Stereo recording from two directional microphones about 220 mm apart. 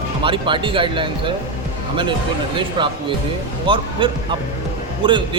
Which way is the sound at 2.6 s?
20° right (ahead or behind).